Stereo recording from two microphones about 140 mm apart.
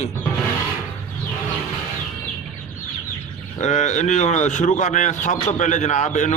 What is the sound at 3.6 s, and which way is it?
Speech, 60° left (ahead or behind).